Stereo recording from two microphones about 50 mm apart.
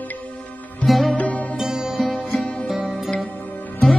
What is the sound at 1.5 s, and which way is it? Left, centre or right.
Music, centre.